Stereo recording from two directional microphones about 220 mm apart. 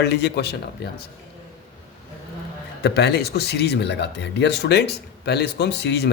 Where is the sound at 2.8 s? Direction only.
50° left (ahead or behind).